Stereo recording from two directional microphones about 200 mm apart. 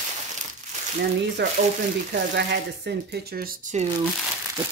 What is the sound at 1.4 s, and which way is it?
Speech, 60° right (ahead or behind).